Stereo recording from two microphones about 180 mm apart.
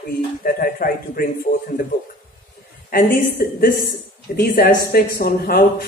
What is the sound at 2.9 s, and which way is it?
A man's voice, 55° left (ahead or behind).